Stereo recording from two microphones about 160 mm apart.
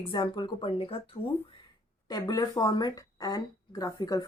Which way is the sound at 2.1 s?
25° left (ahead or behind).